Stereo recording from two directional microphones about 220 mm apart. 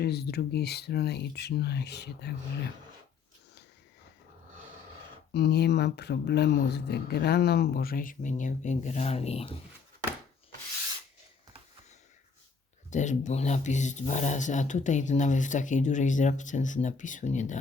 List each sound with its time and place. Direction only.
0.0 s speech: 45° left (ahead or behind)
5.3 s speech: 50° left (ahead or behind); by 9.6 s 25° left (ahead or behind)
12.9 s speech: 35° left (ahead or behind)